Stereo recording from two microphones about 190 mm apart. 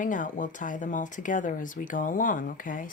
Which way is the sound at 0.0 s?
45° left (ahead or behind).